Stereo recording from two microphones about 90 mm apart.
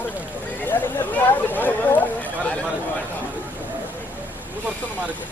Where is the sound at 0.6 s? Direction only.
20° left (ahead or behind).